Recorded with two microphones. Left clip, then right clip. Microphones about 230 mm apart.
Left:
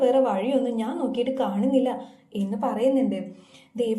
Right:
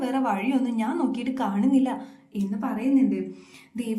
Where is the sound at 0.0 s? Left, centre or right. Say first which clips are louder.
Left 5 dB; centre.